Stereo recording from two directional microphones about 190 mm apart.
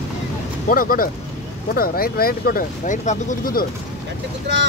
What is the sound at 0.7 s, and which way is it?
Speech, 50° left (ahead or behind).